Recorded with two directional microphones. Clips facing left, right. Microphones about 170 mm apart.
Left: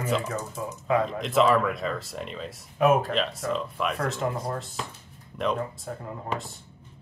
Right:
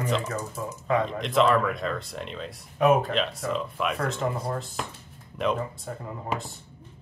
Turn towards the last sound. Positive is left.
turn(degrees=0)  # may be behind; listen again after turning